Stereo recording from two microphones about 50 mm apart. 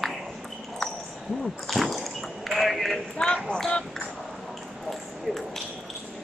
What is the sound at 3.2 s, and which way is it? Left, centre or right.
Speech, left.